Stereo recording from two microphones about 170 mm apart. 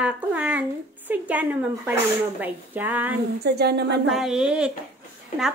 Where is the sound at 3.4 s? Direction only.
75° right (ahead or behind).